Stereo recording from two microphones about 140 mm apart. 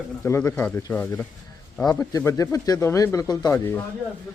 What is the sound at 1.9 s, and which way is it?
Speech, 25° left (ahead or behind).